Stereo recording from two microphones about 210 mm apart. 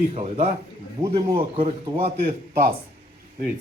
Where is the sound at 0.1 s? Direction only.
30° right (ahead or behind).